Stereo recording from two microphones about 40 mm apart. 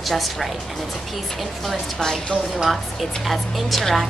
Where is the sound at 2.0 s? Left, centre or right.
Centre.